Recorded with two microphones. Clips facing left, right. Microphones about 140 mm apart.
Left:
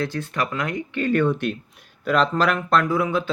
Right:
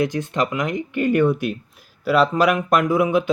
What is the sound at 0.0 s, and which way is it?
Speech, 20° right (ahead or behind).